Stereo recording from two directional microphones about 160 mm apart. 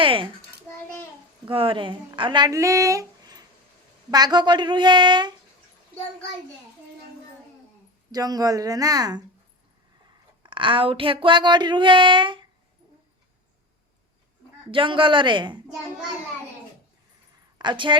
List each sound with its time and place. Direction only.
0.0 s a child's voice: 35° right (ahead or behind)
1.5 s speech: 35° right (ahead or behind)
8.1 s speech: 25° right (ahead or behind)
10.4 s speech: 30° right (ahead or behind)
14.7 s speech: 30° right (ahead or behind)
17.6 s a woman's voice: 30° right (ahead or behind)